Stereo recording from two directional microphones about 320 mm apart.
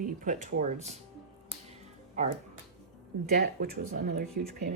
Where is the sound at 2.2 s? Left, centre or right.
Right.